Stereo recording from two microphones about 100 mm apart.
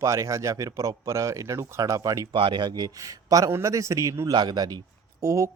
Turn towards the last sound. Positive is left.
turn(degrees=-35)  # may be behind; listen again after turning